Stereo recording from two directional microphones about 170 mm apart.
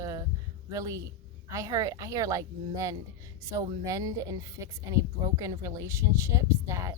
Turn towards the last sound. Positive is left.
turn(degrees=-20)  # may be behind; listen again after turning